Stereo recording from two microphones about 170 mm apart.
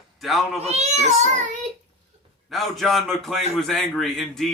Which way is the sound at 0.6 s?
40° right (ahead or behind).